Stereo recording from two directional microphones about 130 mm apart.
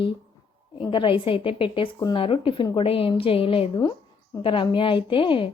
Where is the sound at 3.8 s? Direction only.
35° left (ahead or behind).